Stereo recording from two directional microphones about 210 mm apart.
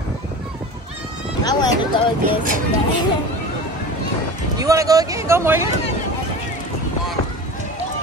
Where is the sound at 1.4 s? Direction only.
20° left (ahead or behind).